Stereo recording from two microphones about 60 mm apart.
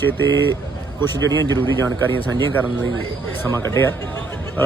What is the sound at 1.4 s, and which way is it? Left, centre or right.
Speech, left.